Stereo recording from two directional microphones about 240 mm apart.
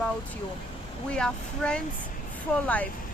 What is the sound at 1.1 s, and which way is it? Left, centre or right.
Speech, centre.